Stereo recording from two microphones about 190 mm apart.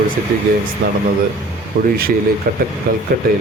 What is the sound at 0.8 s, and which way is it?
Speech, 75° right (ahead or behind).